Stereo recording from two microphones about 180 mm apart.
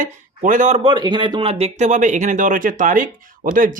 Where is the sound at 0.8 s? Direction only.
25° right (ahead or behind); by 3.8 s 50° right (ahead or behind).